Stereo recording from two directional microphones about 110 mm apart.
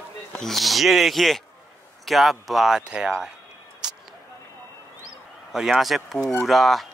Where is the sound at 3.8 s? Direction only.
10° right (ahead or behind).